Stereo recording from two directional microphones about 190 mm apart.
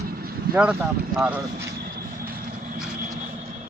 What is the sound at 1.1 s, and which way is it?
Speech, 10° right (ahead or behind).